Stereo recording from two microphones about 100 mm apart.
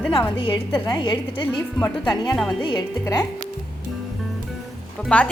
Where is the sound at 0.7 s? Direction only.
45° left (ahead or behind).